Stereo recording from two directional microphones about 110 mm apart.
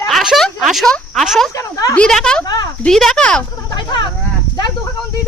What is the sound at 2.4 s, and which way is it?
Speech, 35° left (ahead or behind).